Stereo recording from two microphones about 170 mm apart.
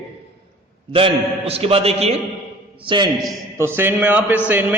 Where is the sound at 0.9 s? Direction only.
35° right (ahead or behind).